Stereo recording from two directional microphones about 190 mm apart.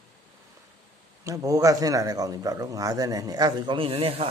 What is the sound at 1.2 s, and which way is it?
A man's voice, 15° right (ahead or behind).